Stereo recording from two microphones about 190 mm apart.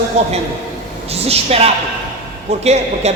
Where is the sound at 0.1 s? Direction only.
35° right (ahead or behind).